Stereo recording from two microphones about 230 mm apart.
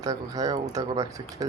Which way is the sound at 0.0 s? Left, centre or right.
Centre.